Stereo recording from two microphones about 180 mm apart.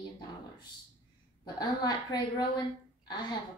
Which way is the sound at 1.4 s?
25° left (ahead or behind).